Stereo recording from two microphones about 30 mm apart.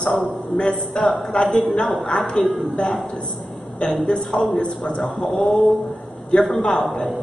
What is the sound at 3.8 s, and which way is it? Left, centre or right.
Speech, left.